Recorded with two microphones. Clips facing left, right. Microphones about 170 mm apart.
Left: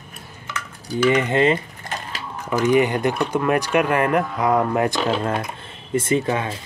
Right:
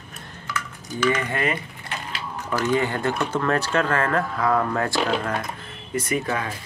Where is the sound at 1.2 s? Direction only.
25° left (ahead or behind).